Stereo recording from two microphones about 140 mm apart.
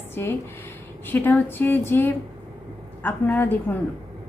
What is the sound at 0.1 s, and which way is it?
A woman's voice, 15° left (ahead or behind).